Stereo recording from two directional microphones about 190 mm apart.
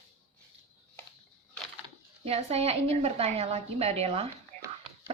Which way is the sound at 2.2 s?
30° right (ahead or behind).